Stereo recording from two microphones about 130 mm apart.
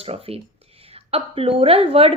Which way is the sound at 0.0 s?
50° right (ahead or behind).